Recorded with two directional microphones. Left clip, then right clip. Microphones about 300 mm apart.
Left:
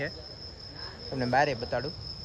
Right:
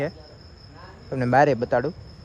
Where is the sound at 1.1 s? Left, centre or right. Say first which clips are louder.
Right 7 dB; right.